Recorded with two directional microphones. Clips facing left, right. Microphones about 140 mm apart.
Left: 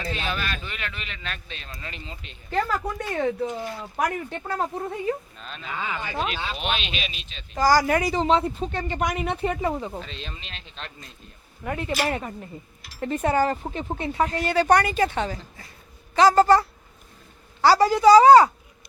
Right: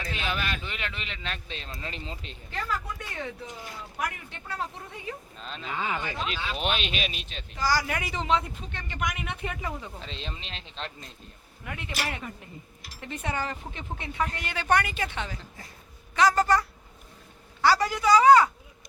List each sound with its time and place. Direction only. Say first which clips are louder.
0.1 s a man's voice: left 1 dB; 15° right (ahead or behind); by 2.4 s 30° right (ahead or behind)
2.5 s speech: left 8 dB; 45° left (ahead or behind)
5.4 s a man's voice: even; 25° right (ahead or behind)
6.6 s speech: even; 40° right (ahead or behind)
7.5 s speech: left 8 dB; 40° left (ahead or behind)
10.0 s a man's voice: left 1 dB; 25° right (ahead or behind)
11.6 s a woman's voice: left 8 dB; 40° left (ahead or behind)